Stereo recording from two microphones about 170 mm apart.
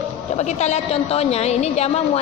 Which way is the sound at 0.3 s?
40° left (ahead or behind).